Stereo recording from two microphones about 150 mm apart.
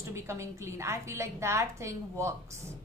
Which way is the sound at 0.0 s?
20° right (ahead or behind).